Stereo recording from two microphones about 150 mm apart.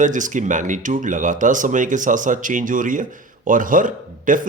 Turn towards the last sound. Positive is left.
turn(degrees=-60)  # may be behind; listen again after turning